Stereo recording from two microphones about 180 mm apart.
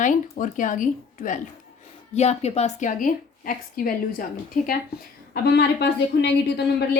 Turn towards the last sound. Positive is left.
turn(degrees=70)  # may be behind; listen again after turning